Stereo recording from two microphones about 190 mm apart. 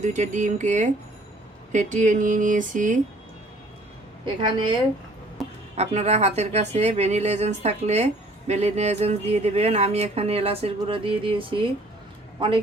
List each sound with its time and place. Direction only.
0.0 s speech: 40° right (ahead or behind)
4.4 s a woman's voice: 25° right (ahead or behind)
5.7 s speech: 35° right (ahead or behind)